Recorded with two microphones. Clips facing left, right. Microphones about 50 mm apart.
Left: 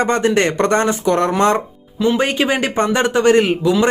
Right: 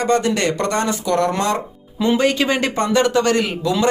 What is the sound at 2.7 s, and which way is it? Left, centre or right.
Speech, left.